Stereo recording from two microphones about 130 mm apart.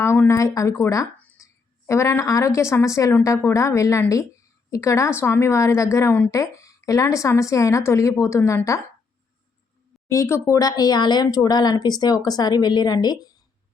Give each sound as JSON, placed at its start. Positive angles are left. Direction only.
{"t": 0.0, "sound": "a woman's voice", "side_deg": 20}
{"t": 10.1, "sound": "speech", "side_deg": 20}